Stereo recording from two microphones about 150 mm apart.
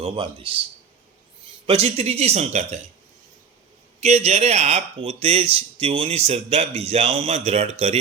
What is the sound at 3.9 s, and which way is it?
Speech, 45° right (ahead or behind).